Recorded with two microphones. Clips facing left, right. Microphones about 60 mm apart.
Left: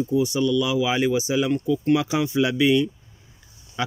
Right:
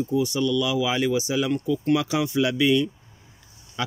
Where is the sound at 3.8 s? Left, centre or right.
Centre.